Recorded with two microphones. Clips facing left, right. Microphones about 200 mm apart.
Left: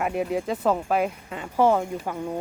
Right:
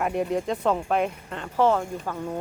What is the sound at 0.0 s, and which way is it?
Speech, 5° left (ahead or behind).